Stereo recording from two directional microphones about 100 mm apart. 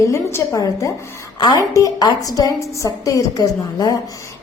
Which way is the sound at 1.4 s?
45° left (ahead or behind).